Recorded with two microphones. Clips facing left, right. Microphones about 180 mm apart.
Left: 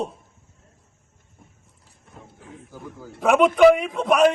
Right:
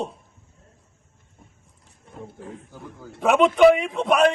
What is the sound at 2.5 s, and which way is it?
A man's voice, centre (ahead or behind).